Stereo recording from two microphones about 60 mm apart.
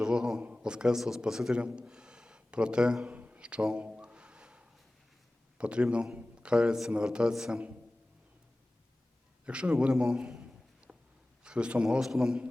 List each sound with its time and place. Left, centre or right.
0.0 s a man's voice: centre
3.2 s a sound: right
5.5 s a man's voice: centre
9.5 s a man's voice: centre
10.9 s a sound: centre
11.4 s a man's voice: centre